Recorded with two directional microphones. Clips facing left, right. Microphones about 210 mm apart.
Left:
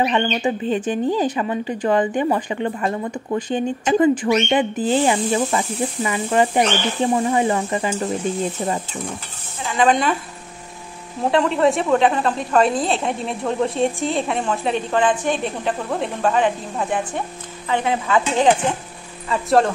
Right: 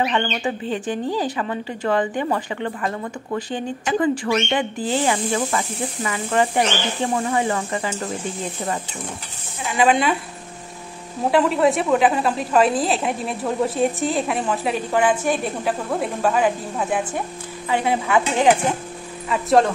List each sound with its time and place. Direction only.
0.0 s speech: 15° left (ahead or behind)
9.8 s a woman's voice: 5° right (ahead or behind)
11.3 s a woman's voice: 5° right (ahead or behind)
19.3 s a woman's voice: centre (ahead or behind)